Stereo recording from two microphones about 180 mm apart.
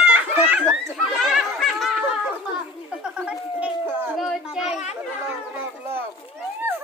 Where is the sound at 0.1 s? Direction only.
10° right (ahead or behind).